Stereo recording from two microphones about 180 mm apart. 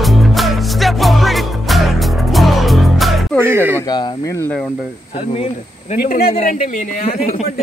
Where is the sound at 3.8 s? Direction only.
20° left (ahead or behind).